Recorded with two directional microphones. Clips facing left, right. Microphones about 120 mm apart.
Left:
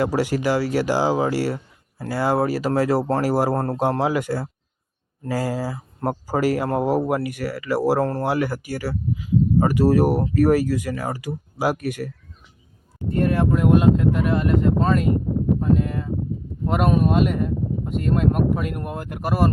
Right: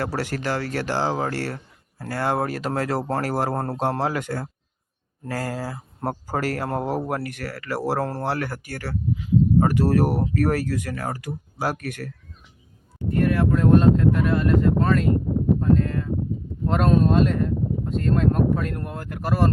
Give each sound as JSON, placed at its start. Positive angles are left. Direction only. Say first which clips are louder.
{"t": 0.0, "sound": "speech", "louder": "left 6 dB", "side_deg": 15}
{"t": 13.1, "sound": "speech", "louder": "left 1 dB", "side_deg": 25}
{"t": 15.7, "sound": "a sound", "louder": "even", "side_deg": 15}
{"t": 16.6, "sound": "speech", "louder": "even", "side_deg": 10}